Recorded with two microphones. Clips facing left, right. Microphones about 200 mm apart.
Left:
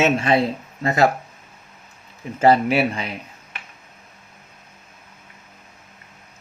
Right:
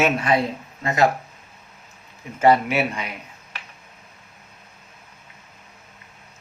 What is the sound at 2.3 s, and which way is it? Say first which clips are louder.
Speech: left 2 dB; 30° left (ahead or behind).